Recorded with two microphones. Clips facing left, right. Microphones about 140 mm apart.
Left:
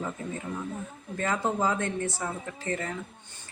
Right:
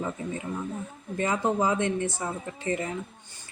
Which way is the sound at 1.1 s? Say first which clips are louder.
Right 2 dB; 15° right (ahead or behind).